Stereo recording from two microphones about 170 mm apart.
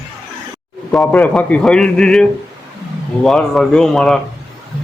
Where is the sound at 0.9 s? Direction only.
10° left (ahead or behind).